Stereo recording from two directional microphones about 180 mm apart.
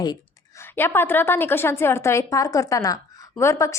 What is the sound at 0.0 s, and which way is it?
A woman's voice, 20° left (ahead or behind).